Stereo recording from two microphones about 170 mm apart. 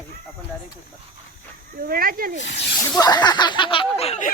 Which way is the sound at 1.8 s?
60° right (ahead or behind).